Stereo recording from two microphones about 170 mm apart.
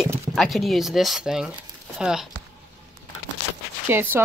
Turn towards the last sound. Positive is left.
turn(degrees=-10)  # may be behind; listen again after turning